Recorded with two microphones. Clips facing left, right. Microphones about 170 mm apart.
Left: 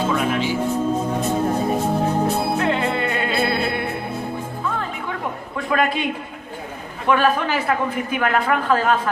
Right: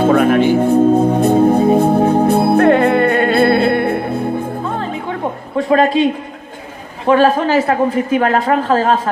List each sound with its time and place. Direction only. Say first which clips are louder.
0.0 s music: right 10 dB; 60° right (ahead or behind)
4.6 s music: right 5 dB; 35° right (ahead or behind)
7.1 s a man's voice: right 7 dB; 40° right (ahead or behind)